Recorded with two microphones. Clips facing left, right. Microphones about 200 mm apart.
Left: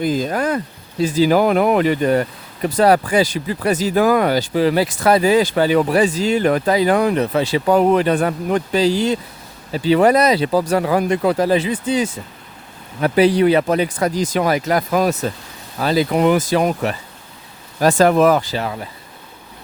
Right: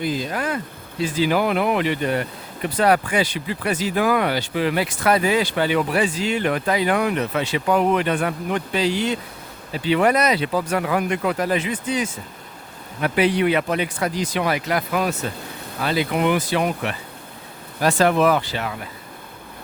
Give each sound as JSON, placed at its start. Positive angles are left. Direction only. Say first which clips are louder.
{"t": 0.0, "sound": "speech", "louder": "left 5 dB", "side_deg": 45}